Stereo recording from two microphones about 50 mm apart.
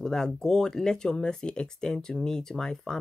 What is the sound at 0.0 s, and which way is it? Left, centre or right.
Speech, centre.